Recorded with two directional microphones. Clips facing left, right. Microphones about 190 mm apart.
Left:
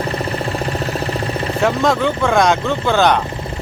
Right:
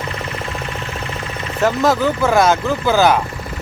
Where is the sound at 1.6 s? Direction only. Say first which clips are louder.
Right 1 dB; centre (ahead or behind).